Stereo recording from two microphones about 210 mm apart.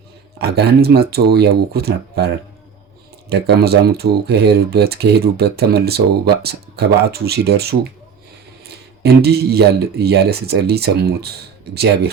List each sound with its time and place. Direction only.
0.3 s speech: 50° right (ahead or behind)